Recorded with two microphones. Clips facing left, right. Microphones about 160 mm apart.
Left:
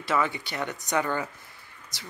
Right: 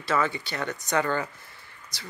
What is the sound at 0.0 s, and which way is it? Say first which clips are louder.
Speech: even; 15° left (ahead or behind).